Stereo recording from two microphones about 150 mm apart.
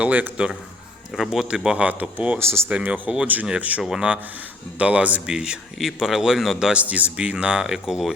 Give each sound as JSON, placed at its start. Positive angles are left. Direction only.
{"t": 0.0, "sound": "speech", "side_deg": -10}